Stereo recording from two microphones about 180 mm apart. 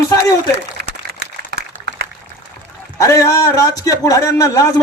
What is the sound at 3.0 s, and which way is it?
A man's voice, 15° left (ahead or behind).